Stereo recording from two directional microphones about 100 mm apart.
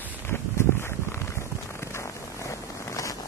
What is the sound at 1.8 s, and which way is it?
Vehicle, 30° left (ahead or behind).